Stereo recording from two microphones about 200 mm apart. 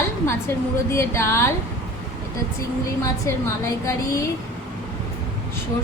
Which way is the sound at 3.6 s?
15° left (ahead or behind).